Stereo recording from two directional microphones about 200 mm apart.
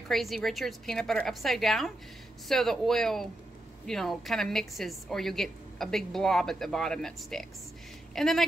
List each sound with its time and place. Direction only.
0.1 s a woman's voice: centre (ahead or behind)